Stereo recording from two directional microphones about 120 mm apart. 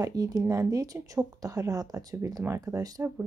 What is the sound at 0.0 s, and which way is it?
Speech, 30° right (ahead or behind).